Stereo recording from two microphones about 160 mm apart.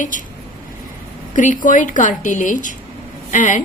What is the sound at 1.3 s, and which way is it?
A woman's voice, 55° left (ahead or behind).